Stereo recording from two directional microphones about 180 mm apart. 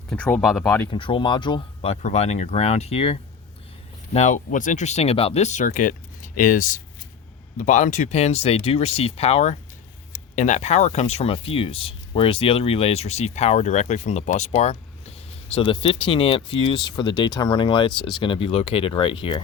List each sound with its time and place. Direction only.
0.1 s speech: 5° left (ahead or behind)
0.9 s speech: 30° left (ahead or behind)